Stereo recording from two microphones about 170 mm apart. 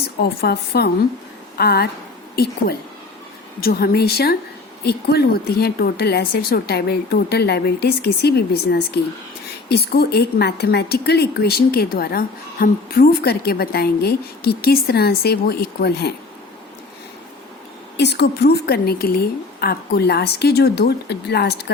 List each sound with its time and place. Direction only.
0.0 s speech: 70° left (ahead or behind)
17.9 s speech: 80° left